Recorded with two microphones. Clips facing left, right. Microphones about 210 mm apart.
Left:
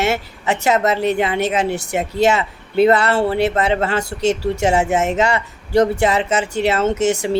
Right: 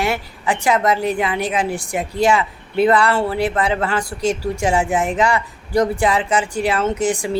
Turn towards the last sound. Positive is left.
turn(degrees=25)  # may be behind; listen again after turning